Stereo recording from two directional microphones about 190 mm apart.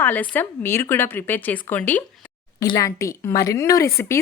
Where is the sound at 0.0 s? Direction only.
10° left (ahead or behind).